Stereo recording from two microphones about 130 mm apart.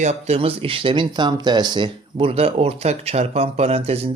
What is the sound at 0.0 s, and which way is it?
Speech, 55° right (ahead or behind).